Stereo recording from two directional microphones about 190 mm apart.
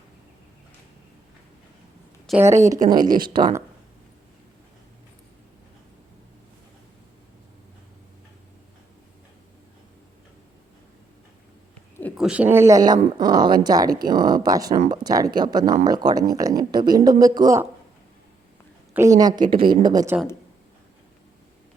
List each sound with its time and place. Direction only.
2.3 s a woman's voice: centre (ahead or behind)
2.8 s speech: 20° right (ahead or behind)
12.1 s speech: 5° right (ahead or behind)
19.2 s speech: 25° right (ahead or behind)